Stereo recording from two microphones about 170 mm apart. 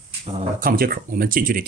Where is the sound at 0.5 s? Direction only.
60° right (ahead or behind).